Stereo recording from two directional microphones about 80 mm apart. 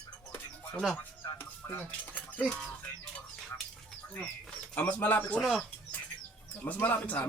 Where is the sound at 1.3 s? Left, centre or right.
Left.